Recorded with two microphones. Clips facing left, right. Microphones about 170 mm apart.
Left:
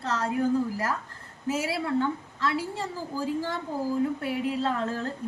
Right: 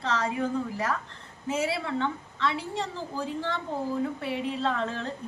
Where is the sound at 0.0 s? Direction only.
Centre (ahead or behind).